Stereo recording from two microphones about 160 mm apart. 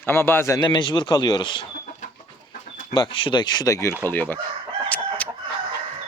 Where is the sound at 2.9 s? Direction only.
30° left (ahead or behind); by 4.4 s 10° left (ahead or behind).